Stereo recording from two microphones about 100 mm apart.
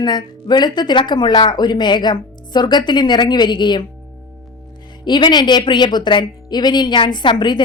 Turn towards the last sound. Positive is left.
turn(degrees=50)  # may be behind; listen again after turning